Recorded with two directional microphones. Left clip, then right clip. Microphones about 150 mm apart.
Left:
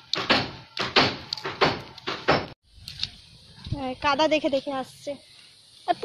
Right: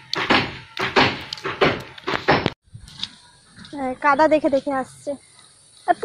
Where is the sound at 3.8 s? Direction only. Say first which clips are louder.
Right 6 dB; 10° left (ahead or behind).